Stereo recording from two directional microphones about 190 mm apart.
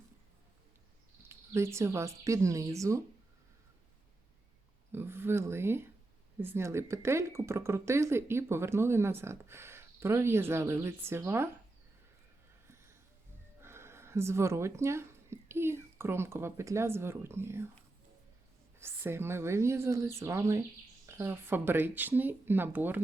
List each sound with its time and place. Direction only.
1.3 s speech: 15° right (ahead or behind)
4.9 s speech: 10° right (ahead or behind)
12.6 s a sound: 15° right (ahead or behind)
13.6 s speech: 15° right (ahead or behind)
18.8 s speech: 10° right (ahead or behind)